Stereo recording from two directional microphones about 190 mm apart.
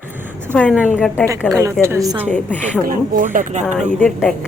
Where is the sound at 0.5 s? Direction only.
5° left (ahead or behind).